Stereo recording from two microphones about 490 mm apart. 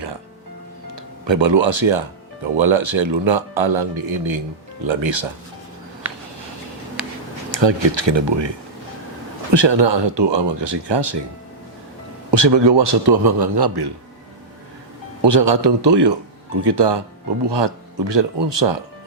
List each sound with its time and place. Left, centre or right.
0.9 s speech: right
7.5 s speech: right
12.3 s a man's voice: right
15.2 s a man's voice: right